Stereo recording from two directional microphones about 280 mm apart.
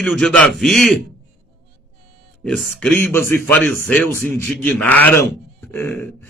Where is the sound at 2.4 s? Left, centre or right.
Centre.